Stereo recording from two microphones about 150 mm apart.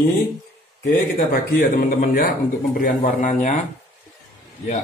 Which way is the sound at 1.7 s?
70° left (ahead or behind).